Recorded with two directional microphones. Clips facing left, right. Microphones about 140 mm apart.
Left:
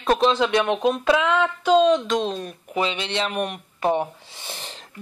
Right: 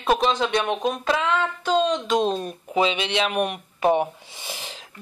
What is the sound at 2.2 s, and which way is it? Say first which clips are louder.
Speech: right 3 dB; 40° right (ahead or behind).